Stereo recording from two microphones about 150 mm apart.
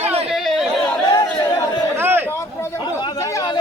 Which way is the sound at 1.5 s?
30° left (ahead or behind).